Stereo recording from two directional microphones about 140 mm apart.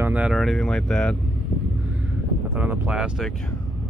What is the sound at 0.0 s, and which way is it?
Speech, 10° right (ahead or behind).